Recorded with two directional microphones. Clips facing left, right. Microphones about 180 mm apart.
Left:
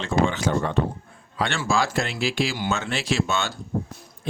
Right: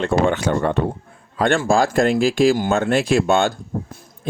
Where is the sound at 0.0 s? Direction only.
60° right (ahead or behind).